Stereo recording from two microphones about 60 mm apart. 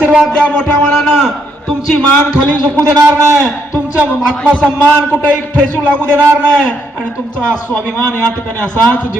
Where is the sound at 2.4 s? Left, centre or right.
Left.